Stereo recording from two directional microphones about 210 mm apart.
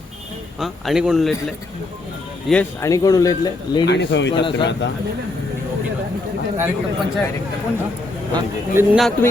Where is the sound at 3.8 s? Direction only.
55° left (ahead or behind).